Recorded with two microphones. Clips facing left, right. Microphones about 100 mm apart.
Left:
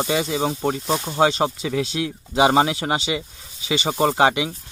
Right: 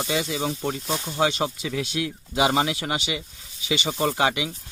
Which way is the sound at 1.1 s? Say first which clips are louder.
Left 5 dB; 35° left (ahead or behind).